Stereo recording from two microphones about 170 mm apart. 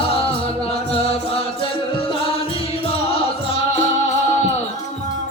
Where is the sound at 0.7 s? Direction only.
35° left (ahead or behind).